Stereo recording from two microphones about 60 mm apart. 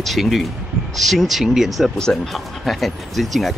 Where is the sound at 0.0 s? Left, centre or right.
Centre.